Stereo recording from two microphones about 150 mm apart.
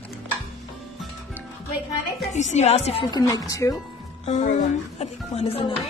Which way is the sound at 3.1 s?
25° left (ahead or behind).